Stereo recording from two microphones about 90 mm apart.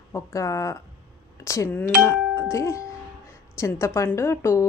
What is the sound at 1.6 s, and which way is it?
Speech, 20° left (ahead or behind).